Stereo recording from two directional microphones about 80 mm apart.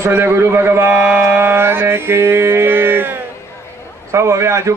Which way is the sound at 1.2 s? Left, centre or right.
Right.